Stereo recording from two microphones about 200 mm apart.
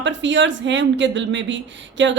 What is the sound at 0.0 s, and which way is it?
Speech, 65° right (ahead or behind).